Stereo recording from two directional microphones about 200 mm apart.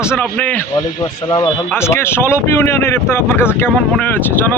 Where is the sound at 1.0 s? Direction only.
25° left (ahead or behind).